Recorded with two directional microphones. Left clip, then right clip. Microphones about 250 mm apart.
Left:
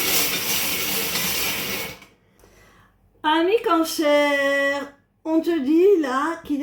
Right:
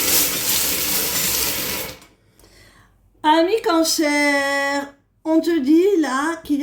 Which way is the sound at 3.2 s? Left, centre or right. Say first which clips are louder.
Right 3 dB; right.